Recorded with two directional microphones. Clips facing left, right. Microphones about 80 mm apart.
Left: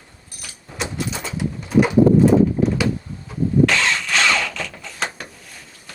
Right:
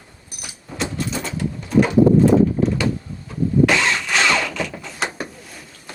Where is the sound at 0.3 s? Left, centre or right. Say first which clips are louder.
Right 2 dB; centre.